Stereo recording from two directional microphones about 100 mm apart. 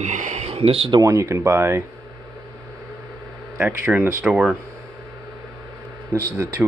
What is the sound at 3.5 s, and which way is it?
Speech, 15° right (ahead or behind).